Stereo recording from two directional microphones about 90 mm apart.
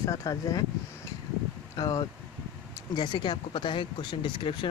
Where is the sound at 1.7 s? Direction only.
50° left (ahead or behind).